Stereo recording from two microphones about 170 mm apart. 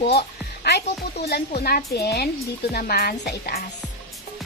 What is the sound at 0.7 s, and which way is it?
A woman's voice, 75° left (ahead or behind).